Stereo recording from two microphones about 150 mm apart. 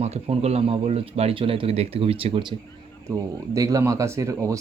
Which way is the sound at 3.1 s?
25° right (ahead or behind).